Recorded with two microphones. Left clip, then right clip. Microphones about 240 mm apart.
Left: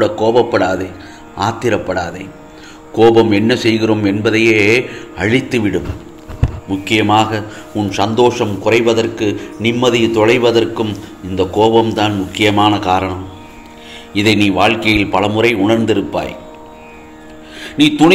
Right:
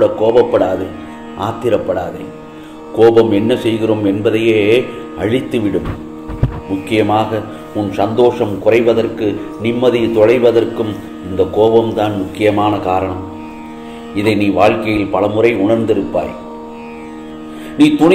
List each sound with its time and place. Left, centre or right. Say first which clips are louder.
0.0 s a man's voice: right 2 dB; left
3.0 s a man's voice: even; left
6.8 s a man's voice: left 2 dB; left
14.1 s a man's voice: left 1 dB; left
17.8 s a man's voice: right 1 dB; left